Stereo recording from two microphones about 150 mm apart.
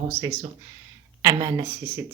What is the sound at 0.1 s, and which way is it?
Speech, 20° right (ahead or behind).